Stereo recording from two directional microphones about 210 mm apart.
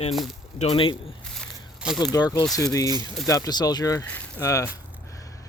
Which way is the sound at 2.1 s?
15° left (ahead or behind).